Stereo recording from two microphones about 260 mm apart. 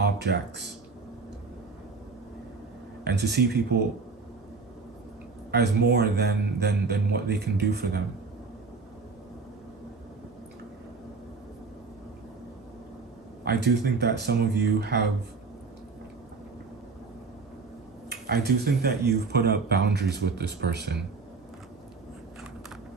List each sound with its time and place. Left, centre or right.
0.0 s speech: right
3.0 s speech: right
5.5 s speech: right
13.4 s speech: right
18.1 s speech: right